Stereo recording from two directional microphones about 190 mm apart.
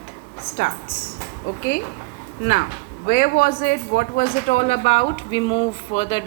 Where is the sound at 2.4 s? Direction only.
45° left (ahead or behind); by 6.3 s 30° left (ahead or behind).